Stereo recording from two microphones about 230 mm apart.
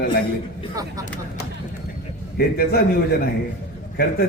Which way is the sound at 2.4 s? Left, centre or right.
Left.